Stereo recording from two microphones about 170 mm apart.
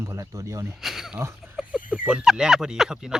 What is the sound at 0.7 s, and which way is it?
Speech, centre (ahead or behind).